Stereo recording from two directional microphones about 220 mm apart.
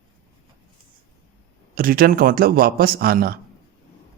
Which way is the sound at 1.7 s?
40° right (ahead or behind).